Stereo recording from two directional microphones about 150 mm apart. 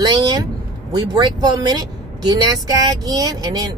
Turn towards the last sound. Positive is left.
turn(degrees=-25)  # may be behind; listen again after turning